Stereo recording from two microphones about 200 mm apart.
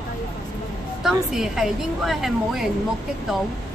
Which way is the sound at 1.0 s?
Centre (ahead or behind).